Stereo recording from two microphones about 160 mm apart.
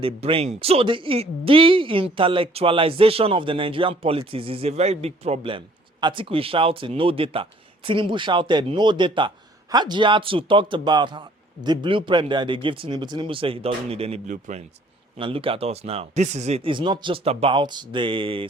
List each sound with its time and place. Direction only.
0.0 s speech: 35° right (ahead or behind)
15.2 s speech: 35° right (ahead or behind)